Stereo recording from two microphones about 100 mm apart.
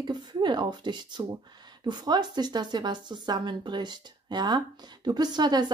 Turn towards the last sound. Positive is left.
turn(degrees=-45)  # may be behind; listen again after turning